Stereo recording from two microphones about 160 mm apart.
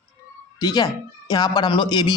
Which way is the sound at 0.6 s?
25° left (ahead or behind).